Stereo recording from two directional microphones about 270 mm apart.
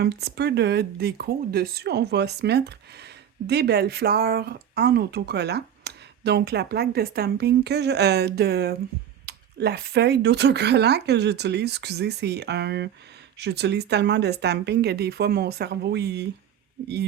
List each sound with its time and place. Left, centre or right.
0.0 s speech: right